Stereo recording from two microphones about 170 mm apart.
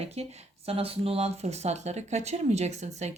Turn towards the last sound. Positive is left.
turn(degrees=-40)  # may be behind; listen again after turning